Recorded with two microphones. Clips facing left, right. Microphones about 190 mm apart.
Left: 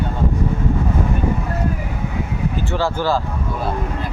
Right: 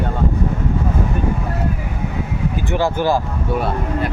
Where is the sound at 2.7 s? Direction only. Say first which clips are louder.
Right 3 dB; 15° right (ahead or behind).